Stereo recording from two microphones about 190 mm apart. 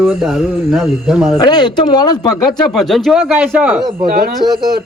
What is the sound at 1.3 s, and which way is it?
Speech, 20° left (ahead or behind).